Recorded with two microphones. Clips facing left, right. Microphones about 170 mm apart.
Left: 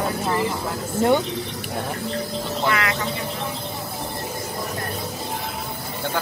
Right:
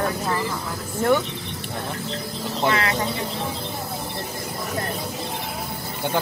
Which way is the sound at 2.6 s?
30° right (ahead or behind).